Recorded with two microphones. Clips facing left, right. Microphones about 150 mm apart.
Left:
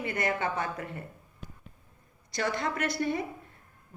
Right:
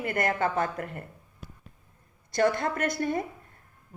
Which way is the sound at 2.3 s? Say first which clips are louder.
Right 6 dB; 50° right (ahead or behind).